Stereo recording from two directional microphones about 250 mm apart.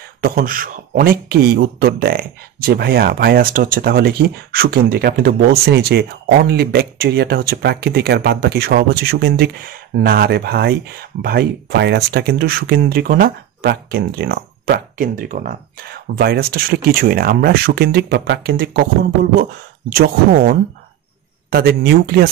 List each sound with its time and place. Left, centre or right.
0.2 s speech: right
19.9 s speech: right